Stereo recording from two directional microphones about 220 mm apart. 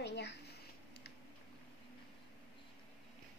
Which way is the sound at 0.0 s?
50° left (ahead or behind).